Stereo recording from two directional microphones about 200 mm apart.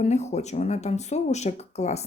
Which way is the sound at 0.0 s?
35° left (ahead or behind).